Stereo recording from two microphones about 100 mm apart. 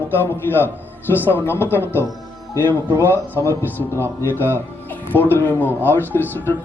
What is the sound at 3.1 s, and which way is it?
A man's voice, 20° left (ahead or behind).